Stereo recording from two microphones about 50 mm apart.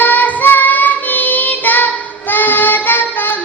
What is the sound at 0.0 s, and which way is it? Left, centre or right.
Child singing, left.